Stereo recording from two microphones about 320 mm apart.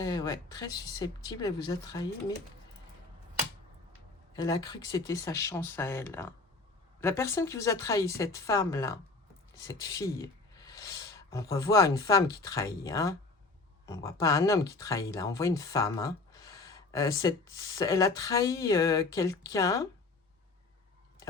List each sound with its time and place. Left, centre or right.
0.0 s speech: centre
4.4 s speech: centre